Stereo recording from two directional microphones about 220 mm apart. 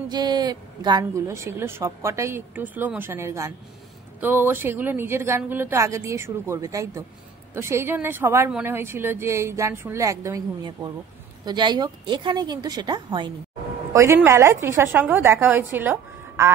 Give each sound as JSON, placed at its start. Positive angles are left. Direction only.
{"t": 0.1, "sound": "a woman's voice", "side_deg": -20}